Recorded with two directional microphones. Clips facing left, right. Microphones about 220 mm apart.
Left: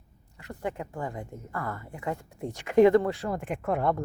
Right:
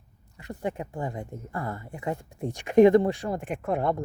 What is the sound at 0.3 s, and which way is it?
A woman's voice, 15° right (ahead or behind).